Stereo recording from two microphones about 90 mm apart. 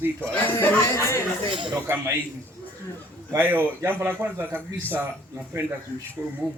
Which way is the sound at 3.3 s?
20° right (ahead or behind).